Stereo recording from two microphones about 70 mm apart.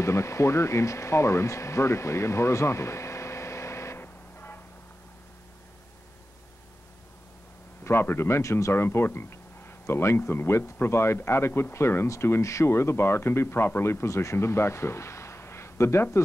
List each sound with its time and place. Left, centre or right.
0.0 s speech: left
7.8 s speech: left